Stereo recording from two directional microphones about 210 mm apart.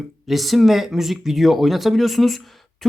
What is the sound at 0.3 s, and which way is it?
Speech, centre (ahead or behind).